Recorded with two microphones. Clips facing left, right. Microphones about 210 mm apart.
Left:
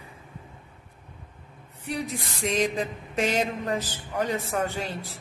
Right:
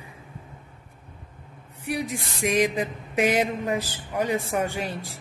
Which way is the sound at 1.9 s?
10° right (ahead or behind).